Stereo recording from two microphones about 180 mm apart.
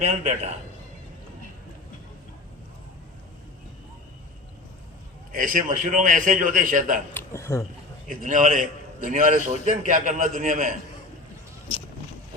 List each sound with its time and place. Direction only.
0.0 s a man's voice: 35° right (ahead or behind)
5.3 s a man's voice: 50° right (ahead or behind)
7.1 s speech: 15° left (ahead or behind)
8.0 s a man's voice: 45° right (ahead or behind)